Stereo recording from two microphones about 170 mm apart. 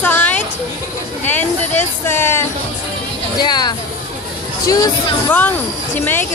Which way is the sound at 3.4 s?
25° left (ahead or behind).